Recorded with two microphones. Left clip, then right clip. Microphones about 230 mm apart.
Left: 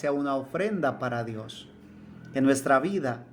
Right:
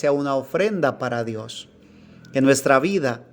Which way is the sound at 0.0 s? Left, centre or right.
Right.